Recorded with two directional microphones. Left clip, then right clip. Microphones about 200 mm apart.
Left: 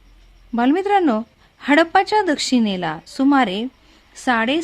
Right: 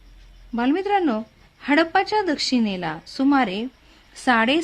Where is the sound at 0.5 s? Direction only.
15° left (ahead or behind).